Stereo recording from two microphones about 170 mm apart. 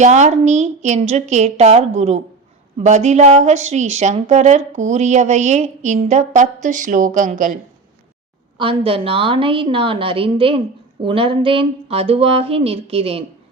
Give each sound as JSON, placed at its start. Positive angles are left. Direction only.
{"t": 0.0, "sound": "a woman's voice", "side_deg": -45}
{"t": 8.5, "sound": "speech", "side_deg": -30}